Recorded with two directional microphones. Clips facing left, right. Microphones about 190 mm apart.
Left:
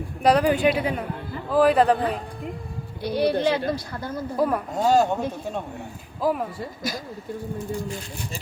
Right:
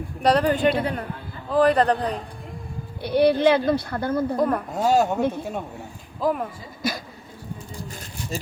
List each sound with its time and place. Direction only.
0.2 s speech: 10° left (ahead or behind)
3.0 s speech: 60° right (ahead or behind)
4.4 s speech: 5° left (ahead or behind)
6.2 s speech: 5° left (ahead or behind)